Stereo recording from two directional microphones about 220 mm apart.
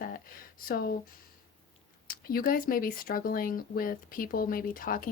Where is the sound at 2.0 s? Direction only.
40° left (ahead or behind).